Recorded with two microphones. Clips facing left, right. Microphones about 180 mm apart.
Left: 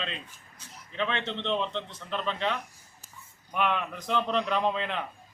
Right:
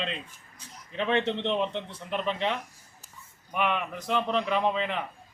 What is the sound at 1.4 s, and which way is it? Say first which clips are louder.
Speech: right 2 dB; 15° right (ahead or behind).